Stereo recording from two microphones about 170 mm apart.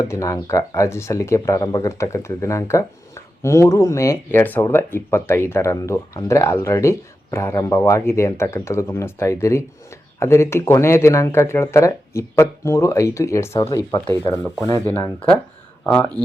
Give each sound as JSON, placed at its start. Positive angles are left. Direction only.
{"t": 0.0, "sound": "speech", "side_deg": 20}